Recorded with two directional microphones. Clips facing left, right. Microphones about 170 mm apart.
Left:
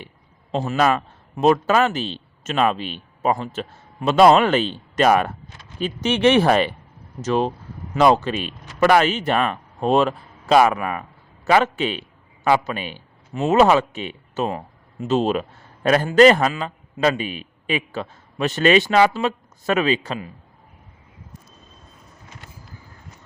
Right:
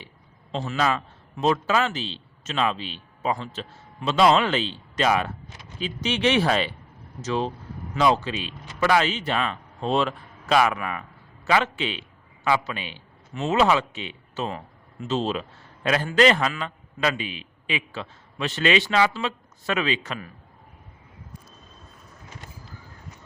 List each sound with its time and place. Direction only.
0.5 s a man's voice: 50° left (ahead or behind)